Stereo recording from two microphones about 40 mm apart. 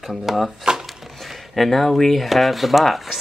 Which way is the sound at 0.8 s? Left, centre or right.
Centre.